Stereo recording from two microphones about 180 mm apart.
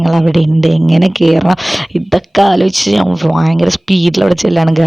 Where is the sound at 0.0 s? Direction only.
Centre (ahead or behind).